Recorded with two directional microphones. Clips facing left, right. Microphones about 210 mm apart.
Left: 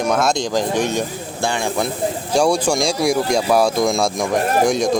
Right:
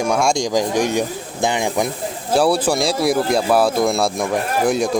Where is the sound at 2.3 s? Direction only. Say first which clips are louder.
Right 1 dB; 5° right (ahead or behind).